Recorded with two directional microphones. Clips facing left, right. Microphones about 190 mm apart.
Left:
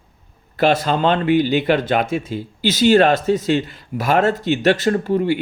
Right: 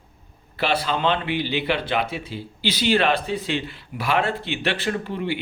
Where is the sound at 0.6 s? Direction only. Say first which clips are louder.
Left 6 dB; 45° left (ahead or behind).